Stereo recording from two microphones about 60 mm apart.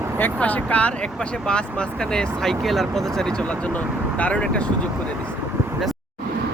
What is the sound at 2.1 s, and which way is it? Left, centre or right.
Speech, centre.